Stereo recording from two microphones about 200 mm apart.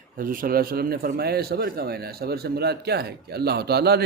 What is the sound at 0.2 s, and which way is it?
A man's voice, 45° right (ahead or behind).